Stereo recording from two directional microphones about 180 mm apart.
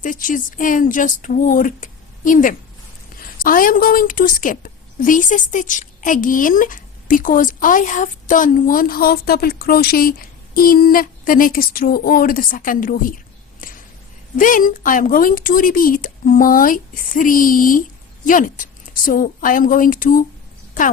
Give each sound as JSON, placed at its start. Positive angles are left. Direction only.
{"t": 0.0, "sound": "a woman's voice", "side_deg": 45}
{"t": 13.6, "sound": "a sound", "side_deg": 50}
{"t": 14.3, "sound": "a woman's voice", "side_deg": 45}